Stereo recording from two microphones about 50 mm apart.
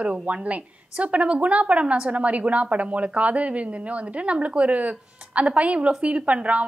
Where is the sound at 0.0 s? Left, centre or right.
Right.